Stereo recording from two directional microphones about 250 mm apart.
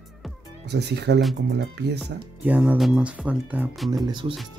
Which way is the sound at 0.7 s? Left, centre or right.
Right.